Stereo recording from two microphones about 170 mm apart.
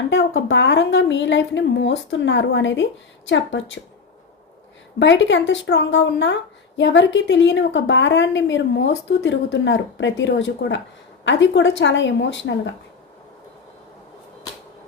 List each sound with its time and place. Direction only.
0.1 s a woman's voice: 90° left
4.9 s a woman's voice: 90° left